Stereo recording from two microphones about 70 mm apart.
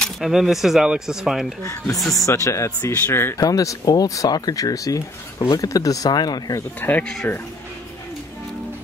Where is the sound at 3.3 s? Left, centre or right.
Left.